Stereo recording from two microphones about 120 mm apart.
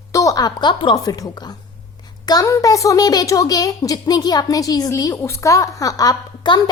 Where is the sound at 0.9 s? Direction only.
30° left (ahead or behind).